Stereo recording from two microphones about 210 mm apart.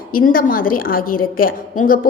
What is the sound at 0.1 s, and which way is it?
A woman's voice, 40° left (ahead or behind).